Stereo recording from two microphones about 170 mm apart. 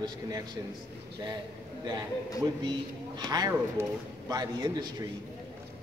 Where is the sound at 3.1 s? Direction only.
25° right (ahead or behind).